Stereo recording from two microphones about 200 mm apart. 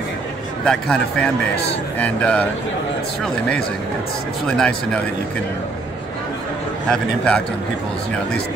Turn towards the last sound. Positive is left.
turn(degrees=5)  # may be behind; listen again after turning